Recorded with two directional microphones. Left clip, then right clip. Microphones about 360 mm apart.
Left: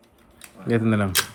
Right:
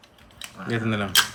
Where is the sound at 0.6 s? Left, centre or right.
Centre.